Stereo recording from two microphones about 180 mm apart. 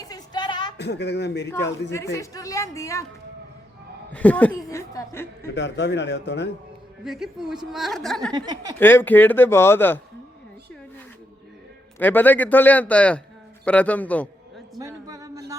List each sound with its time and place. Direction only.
0.0 s a sound: 20° left (ahead or behind)
0.8 s a man's voice: 70° left (ahead or behind)
1.9 s a woman's voice: 15° left (ahead or behind)
4.1 s a woman's voice: 10° left (ahead or behind)
5.5 s a man's voice: 75° left (ahead or behind)
7.0 s a woman's voice: centre (ahead or behind)
8.3 s speech: 25° right (ahead or behind)
8.8 s a woman's voice: 10° left (ahead or behind)
11.9 s a woman's voice: 10° left (ahead or behind)
14.8 s a sound: 20° right (ahead or behind)